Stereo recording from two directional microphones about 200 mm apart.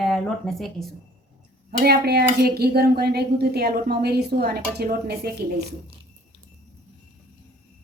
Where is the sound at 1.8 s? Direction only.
50° right (ahead or behind).